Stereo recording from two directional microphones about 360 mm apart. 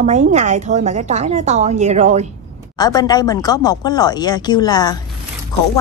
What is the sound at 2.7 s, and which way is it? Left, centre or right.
Speech, centre.